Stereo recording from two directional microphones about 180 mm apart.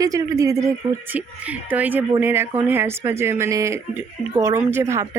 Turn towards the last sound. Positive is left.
turn(degrees=-15)  # may be behind; listen again after turning